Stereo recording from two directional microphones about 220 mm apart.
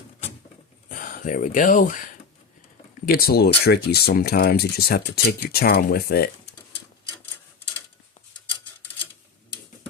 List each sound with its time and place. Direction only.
0.9 s speech: 40° left (ahead or behind)
3.1 s speech: 45° left (ahead or behind)